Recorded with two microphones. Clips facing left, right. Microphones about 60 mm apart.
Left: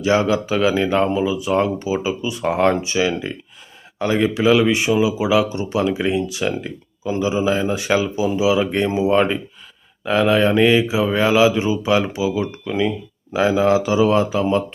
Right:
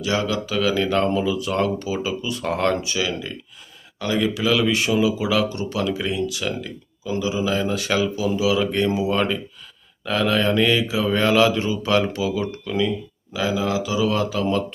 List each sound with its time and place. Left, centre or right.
0.0 s speech: left